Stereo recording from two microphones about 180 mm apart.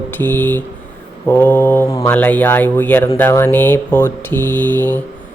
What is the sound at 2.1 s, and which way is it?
Speech, 10° left (ahead or behind).